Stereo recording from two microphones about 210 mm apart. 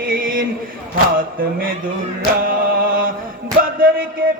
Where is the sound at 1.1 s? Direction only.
45° right (ahead or behind).